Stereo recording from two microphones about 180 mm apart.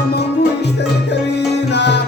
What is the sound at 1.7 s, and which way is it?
Music, 70° left (ahead or behind).